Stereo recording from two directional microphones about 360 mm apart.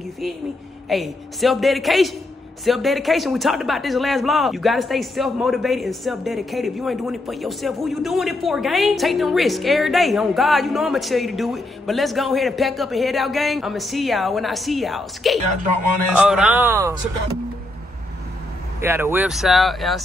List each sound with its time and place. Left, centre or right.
0.8 s speech: centre
18.8 s speech: centre